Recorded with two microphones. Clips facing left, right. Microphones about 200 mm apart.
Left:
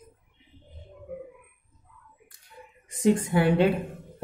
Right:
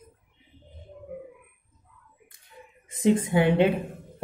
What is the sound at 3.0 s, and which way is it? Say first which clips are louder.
Speech: right 1 dB; 20° right (ahead or behind).